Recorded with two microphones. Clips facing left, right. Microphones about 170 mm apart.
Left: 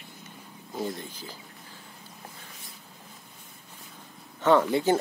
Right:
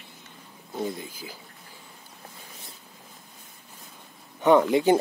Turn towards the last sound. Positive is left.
turn(degrees=-15)  # may be behind; listen again after turning